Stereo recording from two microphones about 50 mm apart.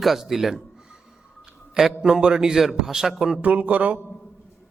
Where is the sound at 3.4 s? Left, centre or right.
Right.